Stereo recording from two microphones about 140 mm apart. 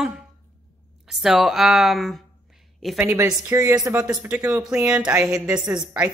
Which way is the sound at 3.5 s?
25° right (ahead or behind).